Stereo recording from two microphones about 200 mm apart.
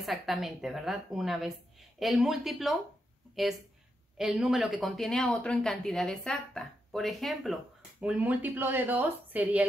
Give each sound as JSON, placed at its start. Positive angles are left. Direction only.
{"t": 0.0, "sound": "speech", "side_deg": 0}
{"t": 4.2, "sound": "speech", "side_deg": 0}